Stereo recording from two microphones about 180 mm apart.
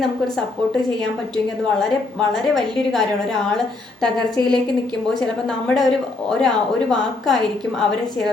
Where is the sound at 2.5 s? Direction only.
Centre (ahead or behind).